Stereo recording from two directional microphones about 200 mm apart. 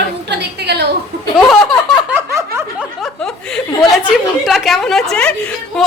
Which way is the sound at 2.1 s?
15° right (ahead or behind).